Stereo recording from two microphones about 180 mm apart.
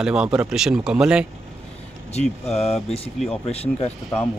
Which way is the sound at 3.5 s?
35° left (ahead or behind).